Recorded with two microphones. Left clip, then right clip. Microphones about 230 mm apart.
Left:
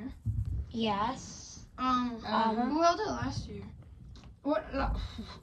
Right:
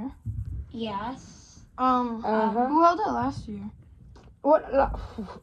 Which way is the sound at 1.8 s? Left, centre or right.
Centre.